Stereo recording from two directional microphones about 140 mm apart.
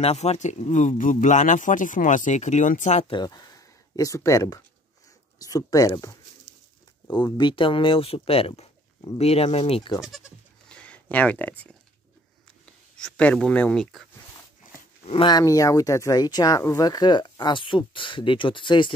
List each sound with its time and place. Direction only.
0.0 s speech: 50° left (ahead or behind)
3.1 s speech: 30° left (ahead or behind)
10.0 s bleat: centre (ahead or behind)
12.9 s speech: 5° left (ahead or behind)
15.0 s speech: 35° left (ahead or behind)